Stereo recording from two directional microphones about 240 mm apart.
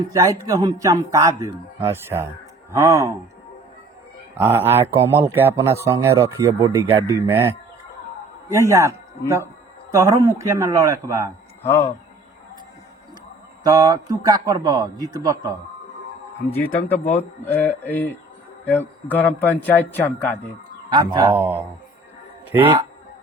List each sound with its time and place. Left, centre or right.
0.1 s speech: centre
4.4 s speech: centre
8.7 s speech: centre
11.6 s speech: centre
13.7 s speech: centre
17.0 s a man's voice: left
17.4 s speech: centre
20.9 s speech: centre
22.6 s a man's voice: right